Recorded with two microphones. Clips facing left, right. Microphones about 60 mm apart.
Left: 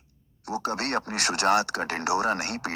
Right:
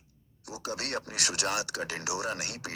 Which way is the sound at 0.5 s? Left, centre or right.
Left.